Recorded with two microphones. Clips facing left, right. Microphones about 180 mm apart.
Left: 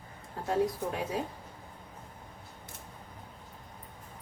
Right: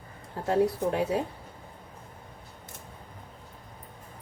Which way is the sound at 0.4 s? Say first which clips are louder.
Right 5 dB; 65° right (ahead or behind).